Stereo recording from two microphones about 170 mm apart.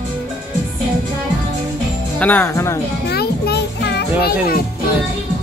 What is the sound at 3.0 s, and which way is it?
Music, 70° left (ahead or behind).